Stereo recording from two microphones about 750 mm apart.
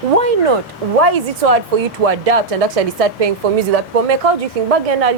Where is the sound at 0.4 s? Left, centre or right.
Right.